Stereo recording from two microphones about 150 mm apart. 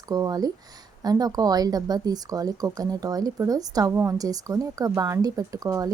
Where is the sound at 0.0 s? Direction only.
25° right (ahead or behind).